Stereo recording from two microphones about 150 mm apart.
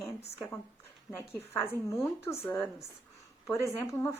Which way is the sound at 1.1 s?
20° left (ahead or behind).